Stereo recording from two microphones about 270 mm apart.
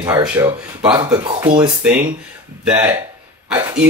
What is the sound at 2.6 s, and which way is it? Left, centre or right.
Speech, centre.